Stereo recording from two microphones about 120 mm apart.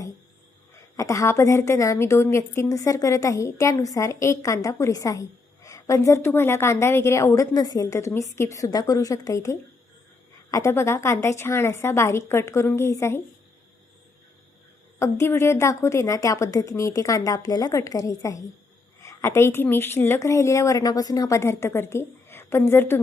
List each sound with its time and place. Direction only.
0.9 s a woman's voice: 30° left (ahead or behind)
14.9 s a woman's voice: 25° left (ahead or behind)